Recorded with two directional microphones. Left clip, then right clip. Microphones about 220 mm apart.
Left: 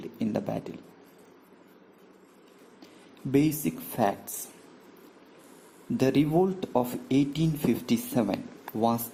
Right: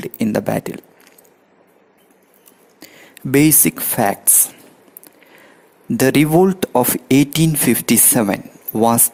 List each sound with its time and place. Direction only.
0.0 s speech: 45° right (ahead or behind)
3.3 s speech: 45° right (ahead or behind)
6.0 s speech: 45° right (ahead or behind)